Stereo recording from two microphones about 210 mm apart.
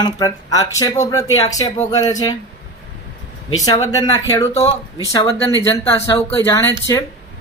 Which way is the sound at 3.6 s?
15° left (ahead or behind).